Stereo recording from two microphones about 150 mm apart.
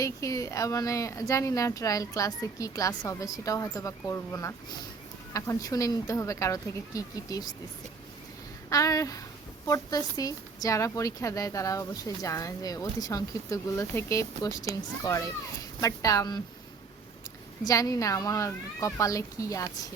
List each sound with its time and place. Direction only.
0.0 s speech: 20° left (ahead or behind)
8.7 s speech: 20° left (ahead or behind)
17.6 s speech: 25° left (ahead or behind)